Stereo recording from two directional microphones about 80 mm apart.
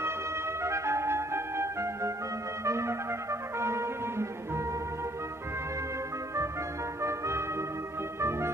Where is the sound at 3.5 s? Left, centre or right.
Right.